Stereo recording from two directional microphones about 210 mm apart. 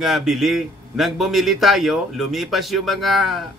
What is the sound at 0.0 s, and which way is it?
A man's voice, centre (ahead or behind).